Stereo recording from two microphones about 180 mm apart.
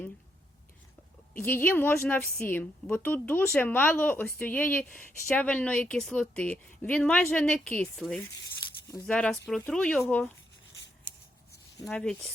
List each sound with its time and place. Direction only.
1.3 s a woman's voice: 10° left (ahead or behind)
8.9 s speech: 15° left (ahead or behind)
9.1 s speech: 5° left (ahead or behind)
11.9 s speech: 5° left (ahead or behind)